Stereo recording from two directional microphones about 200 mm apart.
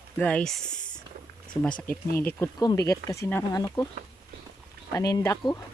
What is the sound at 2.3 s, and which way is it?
Speech, 20° left (ahead or behind).